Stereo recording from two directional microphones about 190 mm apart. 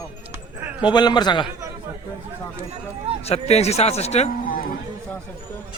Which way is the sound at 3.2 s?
35° left (ahead or behind).